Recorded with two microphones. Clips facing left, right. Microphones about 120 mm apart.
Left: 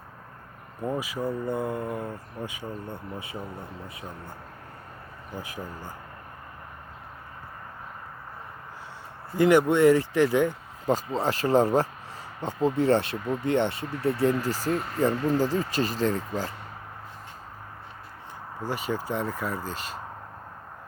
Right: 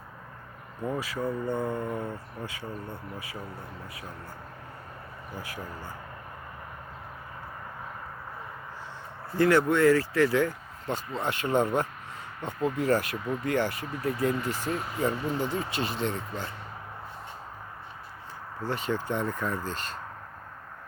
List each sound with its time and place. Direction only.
0.8 s speech: 15° left (ahead or behind)
5.4 s speech: 20° left (ahead or behind)
9.3 s speech: 15° left (ahead or behind)
10.8 s speech: 35° left (ahead or behind)
14.6 s speech: centre (ahead or behind)
15.0 s speech: 35° left (ahead or behind)
18.6 s speech: 10° left (ahead or behind)